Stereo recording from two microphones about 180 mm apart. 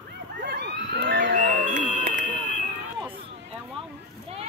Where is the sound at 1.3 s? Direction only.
45° right (ahead or behind).